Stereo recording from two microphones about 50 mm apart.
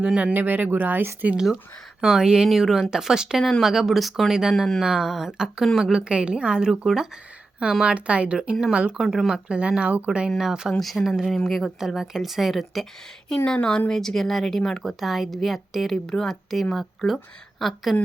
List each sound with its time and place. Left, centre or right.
0.0 s speech: centre
0.3 s speech: right
2.0 s speech: centre
4.5 s speech: centre
4.8 s speech: centre
6.7 s speech: centre
9.0 s speech: centre
10.7 s speech: centre
13.5 s speech: centre
16.0 s speech: centre